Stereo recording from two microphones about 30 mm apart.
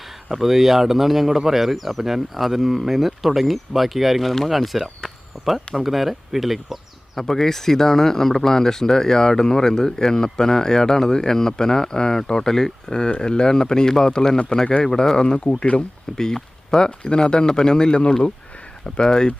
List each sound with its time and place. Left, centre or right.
0.3 s speech: centre
7.2 s speech: centre
13.1 s speech: left
15.4 s speech: left
16.1 s speech: centre
17.0 s speech: left